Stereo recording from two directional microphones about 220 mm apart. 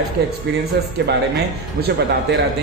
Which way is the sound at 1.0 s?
50° right (ahead or behind).